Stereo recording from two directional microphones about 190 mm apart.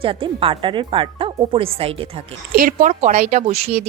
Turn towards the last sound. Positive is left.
turn(degrees=-35)  # may be behind; listen again after turning